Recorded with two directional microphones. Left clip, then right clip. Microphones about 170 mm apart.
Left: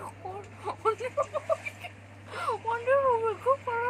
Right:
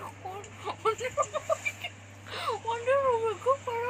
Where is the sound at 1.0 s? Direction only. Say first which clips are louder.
Even; 10° left (ahead or behind).